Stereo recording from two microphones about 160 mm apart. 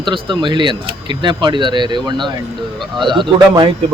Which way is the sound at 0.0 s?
30° right (ahead or behind).